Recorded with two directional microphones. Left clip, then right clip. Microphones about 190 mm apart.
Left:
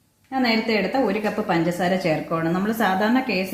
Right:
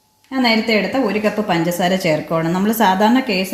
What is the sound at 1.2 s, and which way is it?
A woman's voice, 45° right (ahead or behind).